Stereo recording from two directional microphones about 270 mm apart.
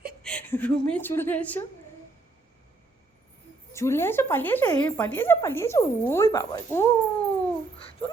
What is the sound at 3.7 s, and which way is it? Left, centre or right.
Speech, centre.